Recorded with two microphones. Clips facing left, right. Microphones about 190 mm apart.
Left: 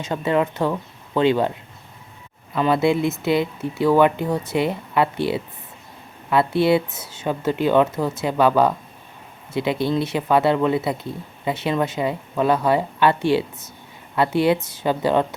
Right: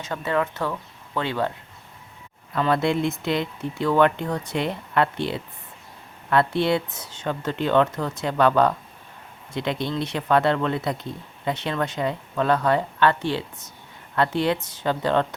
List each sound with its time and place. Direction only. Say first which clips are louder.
0.0 s speech: left 4 dB; 15° left (ahead or behind)
2.6 s speech: left 3 dB; 5° left (ahead or behind)